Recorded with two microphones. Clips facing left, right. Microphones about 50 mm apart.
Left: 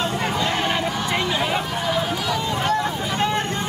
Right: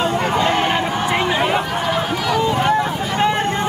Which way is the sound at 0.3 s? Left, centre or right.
Right.